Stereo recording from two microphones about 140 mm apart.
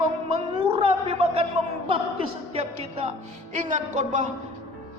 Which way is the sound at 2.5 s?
45° right (ahead or behind).